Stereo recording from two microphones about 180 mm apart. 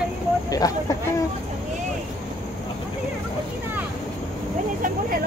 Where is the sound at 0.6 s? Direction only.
20° left (ahead or behind).